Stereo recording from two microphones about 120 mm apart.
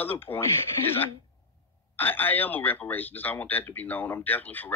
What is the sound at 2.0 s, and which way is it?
Speech, 15° left (ahead or behind).